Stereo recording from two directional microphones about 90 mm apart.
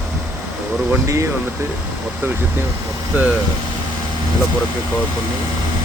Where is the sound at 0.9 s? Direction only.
35° right (ahead or behind).